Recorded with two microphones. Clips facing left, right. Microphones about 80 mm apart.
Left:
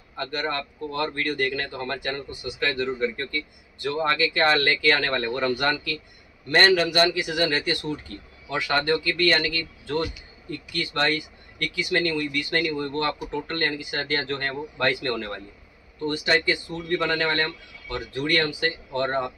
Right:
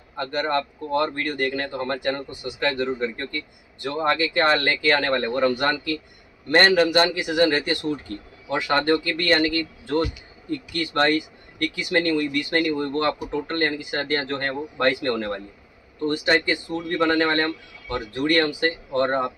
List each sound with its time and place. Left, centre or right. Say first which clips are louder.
0.1 s a man's voice: right 5 dB; right
16.4 s a man's voice: right 1 dB; right